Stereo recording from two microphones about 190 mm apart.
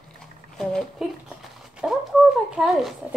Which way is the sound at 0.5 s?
Centre (ahead or behind).